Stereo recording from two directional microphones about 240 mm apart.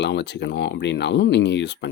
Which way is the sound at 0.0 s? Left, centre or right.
Left.